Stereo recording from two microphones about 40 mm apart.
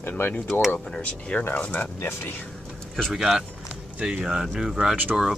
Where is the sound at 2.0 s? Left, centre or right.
Left.